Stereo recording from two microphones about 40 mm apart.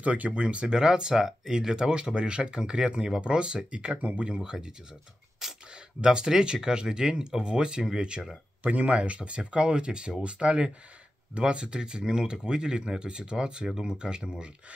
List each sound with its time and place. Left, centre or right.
0.0 s speech: right
4.5 s speech: centre
5.4 s a sound: centre
5.9 s speech: right
8.6 s speech: right